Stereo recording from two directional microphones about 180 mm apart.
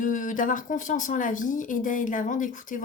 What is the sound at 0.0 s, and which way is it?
A woman's voice, 45° left (ahead or behind).